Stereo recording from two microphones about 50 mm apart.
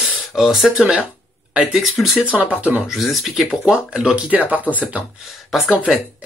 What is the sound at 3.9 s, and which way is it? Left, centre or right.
Speech, centre.